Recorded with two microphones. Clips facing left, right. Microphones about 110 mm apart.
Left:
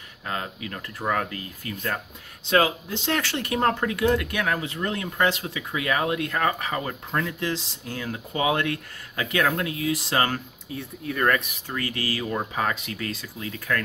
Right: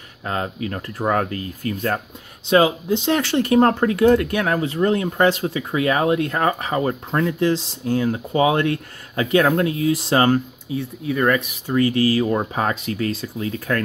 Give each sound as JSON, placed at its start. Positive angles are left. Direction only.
{"t": 0.3, "sound": "speech", "side_deg": -35}
{"t": 2.4, "sound": "speech", "side_deg": -20}
{"t": 3.5, "sound": "speech", "side_deg": -40}
{"t": 10.7, "sound": "speech", "side_deg": -5}
{"t": 11.7, "sound": "speech", "side_deg": -25}